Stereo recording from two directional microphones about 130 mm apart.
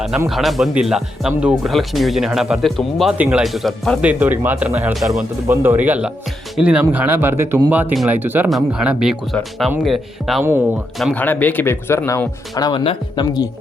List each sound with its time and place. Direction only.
0.3 s speech: centre (ahead or behind)
3.2 s speech: 10° right (ahead or behind)
3.4 s speech: centre (ahead or behind)
4.0 s speech: 10° right (ahead or behind)
8.4 s speech: 5° right (ahead or behind)
11.1 s speech: 15° left (ahead or behind); by 12.8 s 30° left (ahead or behind)
12.8 s speech: 45° left (ahead or behind)